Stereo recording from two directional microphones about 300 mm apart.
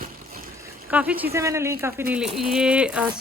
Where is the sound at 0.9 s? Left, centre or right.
Centre.